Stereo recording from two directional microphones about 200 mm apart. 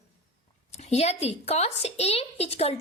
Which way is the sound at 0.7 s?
35° left (ahead or behind).